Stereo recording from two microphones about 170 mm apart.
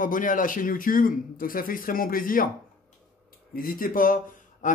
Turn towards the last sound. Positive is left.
turn(degrees=55)  # may be behind; listen again after turning